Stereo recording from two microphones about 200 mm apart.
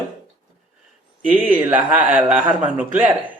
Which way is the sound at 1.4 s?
10° right (ahead or behind).